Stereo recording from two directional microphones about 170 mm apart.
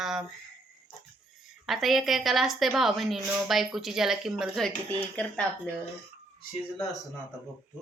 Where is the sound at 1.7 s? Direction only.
Centre (ahead or behind).